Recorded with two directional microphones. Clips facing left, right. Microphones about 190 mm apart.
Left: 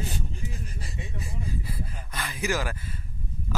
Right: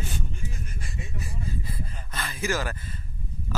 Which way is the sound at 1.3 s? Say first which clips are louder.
Left 1 dB; 15° left (ahead or behind).